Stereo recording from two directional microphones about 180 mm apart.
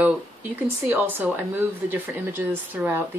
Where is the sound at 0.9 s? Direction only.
10° right (ahead or behind).